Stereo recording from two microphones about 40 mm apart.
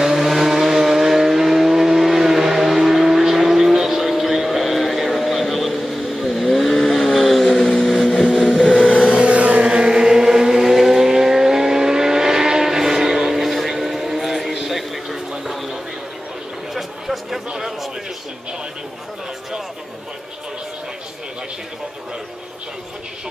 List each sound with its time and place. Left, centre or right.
0.0 s vehicle: centre
9.1 s chant: right; by 15.8 s centre
16.7 s a sound: centre